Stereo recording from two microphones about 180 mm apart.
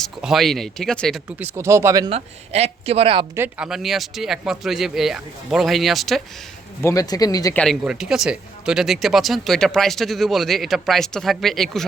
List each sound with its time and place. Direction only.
0.0 s speech: centre (ahead or behind)
1.4 s speech: 15° right (ahead or behind)
2.0 s speech: 35° right (ahead or behind)
3.3 s speech: 10° right (ahead or behind)
6.8 s speech: 20° left (ahead or behind)
7.5 s speech: 5° left (ahead or behind)